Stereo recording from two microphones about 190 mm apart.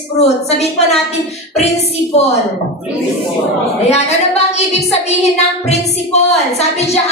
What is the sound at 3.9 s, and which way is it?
A woman's voice, 35° left (ahead or behind).